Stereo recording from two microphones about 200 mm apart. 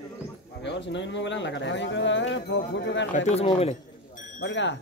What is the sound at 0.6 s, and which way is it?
Speech, 65° left (ahead or behind).